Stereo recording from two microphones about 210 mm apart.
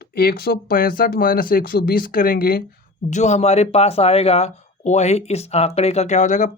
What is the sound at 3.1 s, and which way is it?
Speech, 30° left (ahead or behind).